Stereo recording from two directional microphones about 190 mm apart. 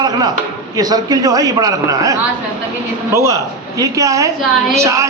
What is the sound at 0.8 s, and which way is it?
A man's voice, 20° right (ahead or behind).